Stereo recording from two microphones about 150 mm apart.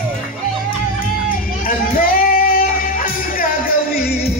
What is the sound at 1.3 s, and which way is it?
Music, 70° left (ahead or behind).